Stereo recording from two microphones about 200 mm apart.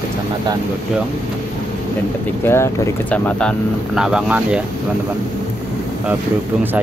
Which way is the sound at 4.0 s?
5° right (ahead or behind).